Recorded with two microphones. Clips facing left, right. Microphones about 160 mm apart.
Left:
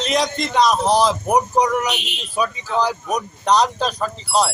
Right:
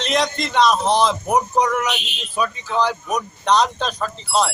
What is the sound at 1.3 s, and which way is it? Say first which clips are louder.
A man's voice: left 1 dB; 15° left (ahead or behind).